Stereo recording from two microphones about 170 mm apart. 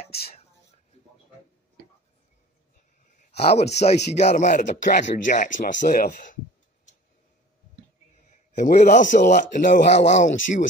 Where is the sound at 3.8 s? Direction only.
40° left (ahead or behind).